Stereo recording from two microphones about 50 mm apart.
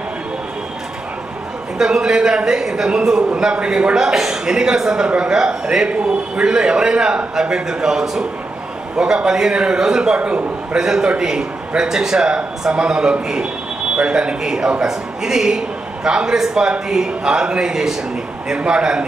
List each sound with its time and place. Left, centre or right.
1.8 s a man's voice: centre